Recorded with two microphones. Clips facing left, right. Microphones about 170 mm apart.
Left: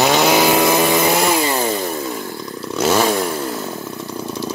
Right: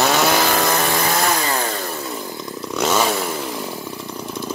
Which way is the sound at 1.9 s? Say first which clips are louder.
Left 4 dB; 5° left (ahead or behind).